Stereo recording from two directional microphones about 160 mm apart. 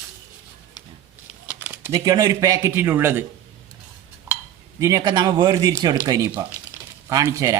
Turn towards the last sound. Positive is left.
turn(degrees=-20)  # may be behind; listen again after turning